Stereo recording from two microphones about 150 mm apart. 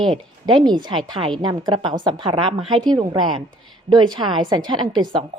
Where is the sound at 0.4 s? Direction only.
30° right (ahead or behind).